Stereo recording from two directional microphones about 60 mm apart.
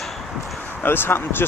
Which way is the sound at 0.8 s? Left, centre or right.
Left.